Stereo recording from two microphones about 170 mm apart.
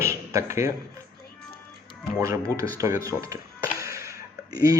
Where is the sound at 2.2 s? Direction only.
20° right (ahead or behind).